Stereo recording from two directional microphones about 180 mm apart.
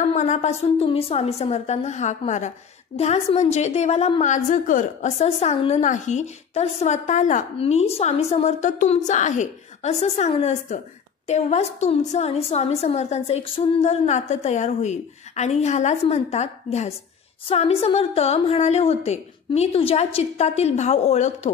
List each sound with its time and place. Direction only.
0.0 s a woman's voice: 40° left (ahead or behind)